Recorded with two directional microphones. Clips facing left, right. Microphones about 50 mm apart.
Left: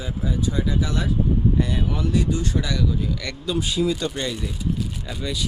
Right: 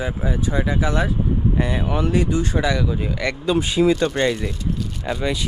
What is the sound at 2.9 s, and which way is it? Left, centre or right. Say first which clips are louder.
Speech: right 4 dB; right.